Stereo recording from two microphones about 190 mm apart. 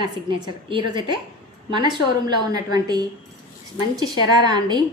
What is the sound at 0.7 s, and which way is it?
A woman's voice, 25° right (ahead or behind).